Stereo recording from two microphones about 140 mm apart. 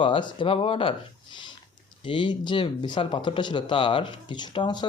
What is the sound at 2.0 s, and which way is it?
Speech, 35° left (ahead or behind).